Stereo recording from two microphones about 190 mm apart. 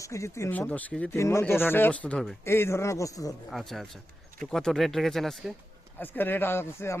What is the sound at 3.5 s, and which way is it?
Speech, centre (ahead or behind).